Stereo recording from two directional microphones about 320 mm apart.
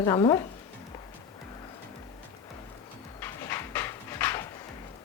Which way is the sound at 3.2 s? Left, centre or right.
Centre.